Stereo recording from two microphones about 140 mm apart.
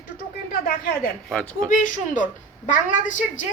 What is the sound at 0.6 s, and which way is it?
Speech, 90° left.